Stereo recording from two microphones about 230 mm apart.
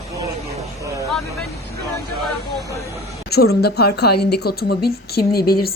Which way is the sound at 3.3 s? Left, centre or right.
Left.